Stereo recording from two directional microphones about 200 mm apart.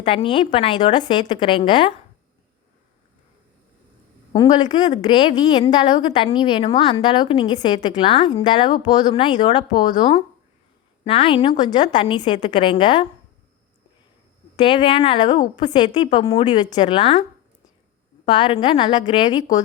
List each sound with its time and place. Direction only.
0.0 s speech: 25° left (ahead or behind)
4.4 s speech: 20° left (ahead or behind)
14.5 s speech: 20° left (ahead or behind)
18.3 s speech: 25° left (ahead or behind)